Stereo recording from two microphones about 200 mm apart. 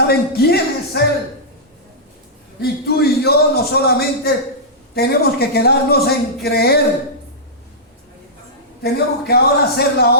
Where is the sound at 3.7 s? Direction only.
50° left (ahead or behind).